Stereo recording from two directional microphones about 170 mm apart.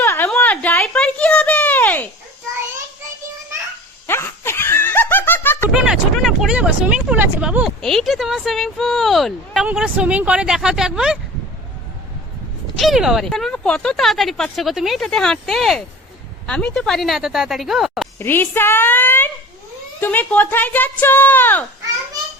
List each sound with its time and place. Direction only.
0.0 s a sound: 15° left (ahead or behind)
4.0 s laughter: 15° left (ahead or behind)
5.7 s speech: 5° right (ahead or behind)
12.7 s speech: centre (ahead or behind)
18.2 s speech: 15° left (ahead or behind)